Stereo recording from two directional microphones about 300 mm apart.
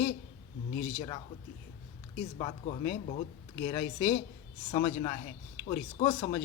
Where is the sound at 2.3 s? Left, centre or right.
Centre.